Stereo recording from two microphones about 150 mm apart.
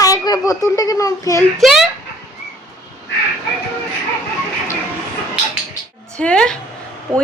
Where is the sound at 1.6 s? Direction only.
Centre (ahead or behind).